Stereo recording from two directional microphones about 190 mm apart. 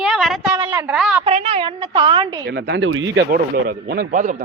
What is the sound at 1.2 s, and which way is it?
Speech, 30° right (ahead or behind).